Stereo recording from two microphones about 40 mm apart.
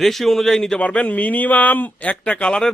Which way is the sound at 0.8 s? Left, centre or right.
Left.